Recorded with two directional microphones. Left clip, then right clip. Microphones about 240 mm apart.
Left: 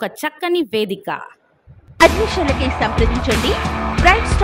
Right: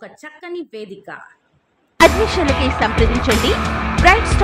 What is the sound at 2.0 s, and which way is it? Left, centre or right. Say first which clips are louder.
A woman's voice: right 1 dB; centre.